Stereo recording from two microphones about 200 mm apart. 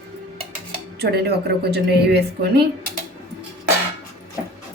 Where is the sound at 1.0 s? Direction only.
55° right (ahead or behind).